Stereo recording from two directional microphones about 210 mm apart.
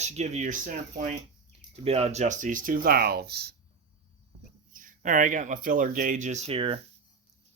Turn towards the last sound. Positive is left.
turn(degrees=-25)  # may be behind; listen again after turning